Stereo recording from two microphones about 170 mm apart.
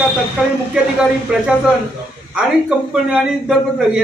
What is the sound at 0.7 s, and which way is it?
A man's voice, 5° right (ahead or behind).